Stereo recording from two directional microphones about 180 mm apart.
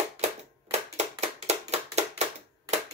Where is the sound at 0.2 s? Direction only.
35° right (ahead or behind).